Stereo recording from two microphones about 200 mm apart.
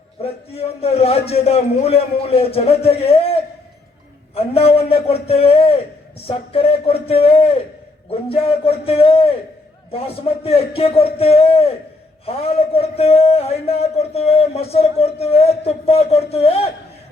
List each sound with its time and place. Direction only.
0.2 s a man's voice: 30° left (ahead or behind)
4.4 s a man's voice: 30° left (ahead or behind)